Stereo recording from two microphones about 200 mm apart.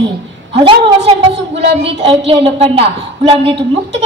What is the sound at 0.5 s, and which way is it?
A woman's voice, 30° right (ahead or behind).